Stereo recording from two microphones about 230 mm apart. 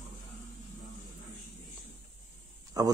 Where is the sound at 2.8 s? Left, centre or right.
Centre.